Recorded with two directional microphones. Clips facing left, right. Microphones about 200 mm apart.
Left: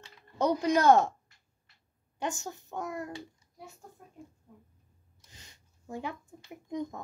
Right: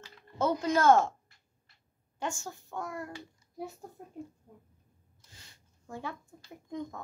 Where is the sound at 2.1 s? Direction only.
20° left (ahead or behind).